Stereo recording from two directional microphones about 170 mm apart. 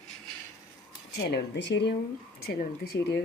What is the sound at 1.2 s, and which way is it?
Speech, 90° left.